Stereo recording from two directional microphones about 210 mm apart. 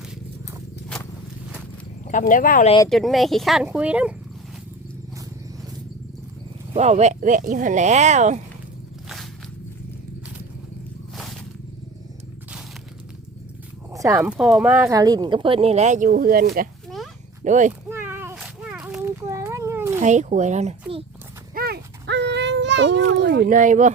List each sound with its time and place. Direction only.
0.9 s a sound: 5° left (ahead or behind)
2.0 s speech: 40° left (ahead or behind)
2.9 s speech: centre (ahead or behind)
6.7 s speech: 30° right (ahead or behind)
11.1 s wild animals: centre (ahead or behind)
13.9 s speech: 15° right (ahead or behind); by 17.7 s 35° right (ahead or behind)
17.8 s a sound: 10° right (ahead or behind)
20.0 s speech: 35° right (ahead or behind)
21.5 s baby cry: 45° right (ahead or behind)